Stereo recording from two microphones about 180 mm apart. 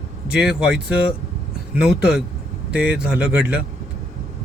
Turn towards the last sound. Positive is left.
turn(degrees=-5)  # may be behind; listen again after turning